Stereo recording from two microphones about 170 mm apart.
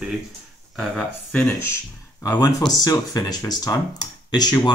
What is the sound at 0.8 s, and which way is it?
Speech, 5° left (ahead or behind).